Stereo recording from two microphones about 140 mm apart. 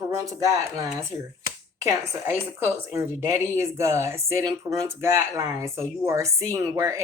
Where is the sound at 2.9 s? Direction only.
20° right (ahead or behind).